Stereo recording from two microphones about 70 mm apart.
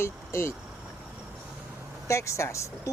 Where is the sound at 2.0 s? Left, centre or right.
Left.